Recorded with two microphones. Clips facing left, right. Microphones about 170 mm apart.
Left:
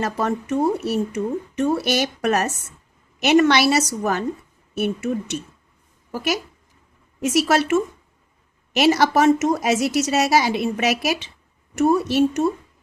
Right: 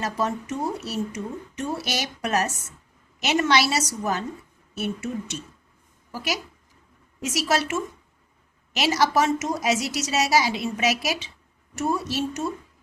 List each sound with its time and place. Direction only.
0.0 s a woman's voice: 55° left (ahead or behind)